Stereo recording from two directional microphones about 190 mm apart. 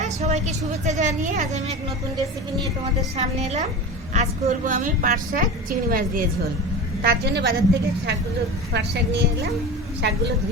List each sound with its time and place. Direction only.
0.0 s a woman's voice: 35° right (ahead or behind)
3.2 s a woman's voice: 35° right (ahead or behind); by 9.5 s 60° right (ahead or behind)